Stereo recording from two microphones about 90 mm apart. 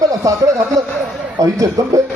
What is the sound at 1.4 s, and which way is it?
Speech, 35° right (ahead or behind).